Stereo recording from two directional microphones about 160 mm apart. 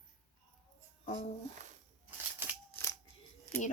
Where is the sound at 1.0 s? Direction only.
50° left (ahead or behind).